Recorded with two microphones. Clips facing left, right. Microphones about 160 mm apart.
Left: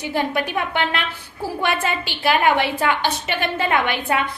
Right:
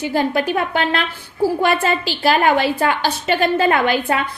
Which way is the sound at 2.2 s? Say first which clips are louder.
Right 2 dB; 35° right (ahead or behind).